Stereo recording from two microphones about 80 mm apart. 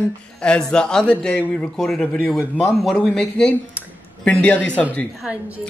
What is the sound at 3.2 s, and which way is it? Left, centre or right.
Speech, centre.